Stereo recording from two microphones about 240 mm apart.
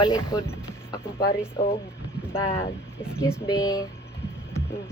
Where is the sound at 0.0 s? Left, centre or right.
Centre.